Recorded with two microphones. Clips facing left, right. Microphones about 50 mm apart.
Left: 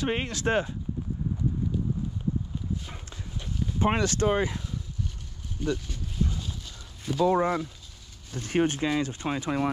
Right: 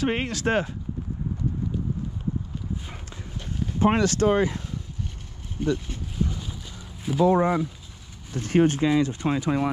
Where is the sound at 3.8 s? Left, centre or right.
Right.